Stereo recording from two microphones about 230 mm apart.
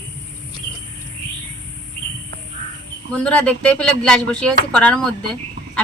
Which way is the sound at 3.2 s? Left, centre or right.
Centre.